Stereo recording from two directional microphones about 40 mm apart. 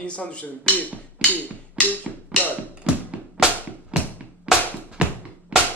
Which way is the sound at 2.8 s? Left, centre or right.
Right.